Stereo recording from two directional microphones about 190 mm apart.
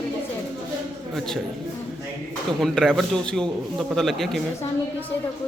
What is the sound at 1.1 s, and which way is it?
Speech, centre (ahead or behind).